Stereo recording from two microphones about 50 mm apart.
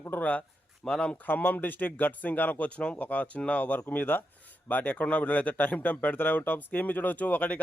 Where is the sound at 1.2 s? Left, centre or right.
Left.